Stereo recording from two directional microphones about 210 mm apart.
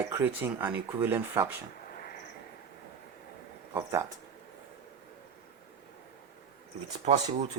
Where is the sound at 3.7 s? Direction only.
10° right (ahead or behind).